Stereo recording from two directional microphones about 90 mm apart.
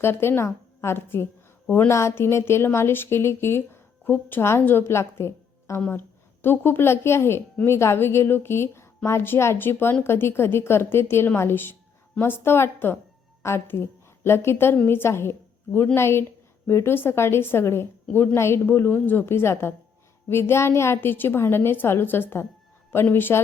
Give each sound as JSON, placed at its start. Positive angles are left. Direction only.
{"t": 0.0, "sound": "a woman's voice", "side_deg": 25}